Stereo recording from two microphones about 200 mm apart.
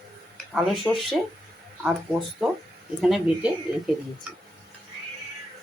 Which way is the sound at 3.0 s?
Centre (ahead or behind).